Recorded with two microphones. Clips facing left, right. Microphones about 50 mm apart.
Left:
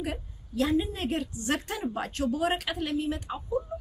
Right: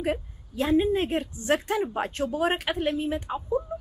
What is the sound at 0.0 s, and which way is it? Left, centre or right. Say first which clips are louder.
A woman's voice: right 6 dB; right.